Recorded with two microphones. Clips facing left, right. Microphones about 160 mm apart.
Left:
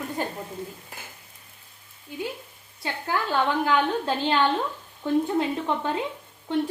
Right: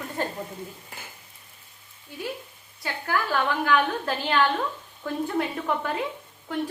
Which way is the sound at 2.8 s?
20° left (ahead or behind).